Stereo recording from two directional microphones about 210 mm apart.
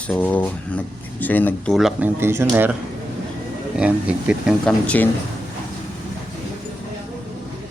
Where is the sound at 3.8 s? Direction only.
5° right (ahead or behind).